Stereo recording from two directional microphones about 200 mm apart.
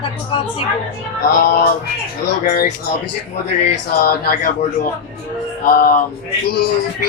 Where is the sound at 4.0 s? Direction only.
50° left (ahead or behind).